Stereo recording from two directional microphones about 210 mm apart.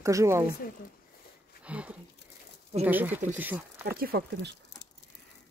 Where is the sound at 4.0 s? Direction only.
50° right (ahead or behind).